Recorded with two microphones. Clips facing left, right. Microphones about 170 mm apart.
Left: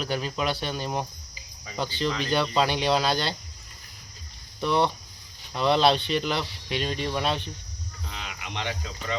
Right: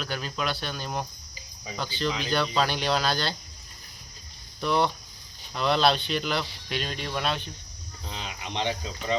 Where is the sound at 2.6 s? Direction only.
20° left (ahead or behind).